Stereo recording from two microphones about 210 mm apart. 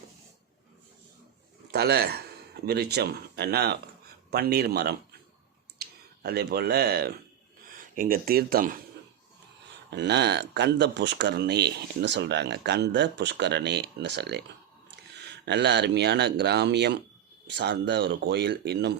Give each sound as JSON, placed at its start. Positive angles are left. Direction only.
{"t": 1.7, "sound": "speech", "side_deg": -50}
{"t": 9.9, "sound": "speech", "side_deg": -55}